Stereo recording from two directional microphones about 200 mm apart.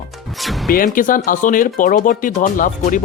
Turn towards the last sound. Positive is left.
turn(degrees=40)  # may be behind; listen again after turning